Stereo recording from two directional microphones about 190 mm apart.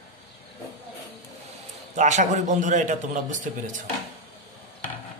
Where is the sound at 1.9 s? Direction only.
40° right (ahead or behind).